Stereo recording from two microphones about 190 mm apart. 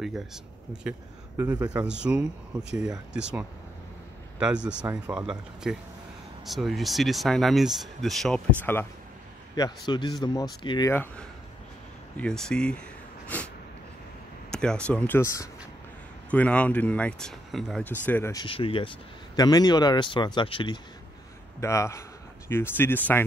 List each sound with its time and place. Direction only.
0.0 s speech: centre (ahead or behind)
9.6 s speech: 20° left (ahead or behind)
10.9 s speech: 10° left (ahead or behind)
13.3 s a sound: 10° left (ahead or behind)
14.5 s speech: 5° left (ahead or behind)
18.4 s speech: 30° left (ahead or behind)
21.5 s speech: 15° left (ahead or behind)